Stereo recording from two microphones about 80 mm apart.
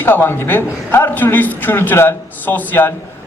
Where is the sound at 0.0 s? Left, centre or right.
Left.